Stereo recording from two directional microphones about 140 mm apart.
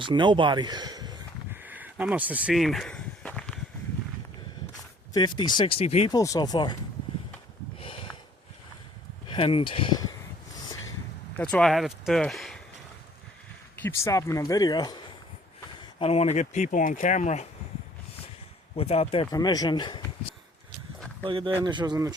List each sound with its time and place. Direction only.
0.0 s speech: 35° right (ahead or behind)
1.5 s a sound: 10° right (ahead or behind)
2.6 s walk: centre (ahead or behind)
5.1 s speech: 30° left (ahead or behind)
6.1 s speech: 25° left (ahead or behind)
7.8 s sniff: 40° left (ahead or behind)
9.3 s speech: 40° left (ahead or behind)
11.5 s speech: centre (ahead or behind)
13.8 s speech: 20° left (ahead or behind)
16.0 s speech: 45° left (ahead or behind)
18.8 s speech: 45° left (ahead or behind)
19.3 s speech: 25° left (ahead or behind)
21.2 s speech: 40° right (ahead or behind)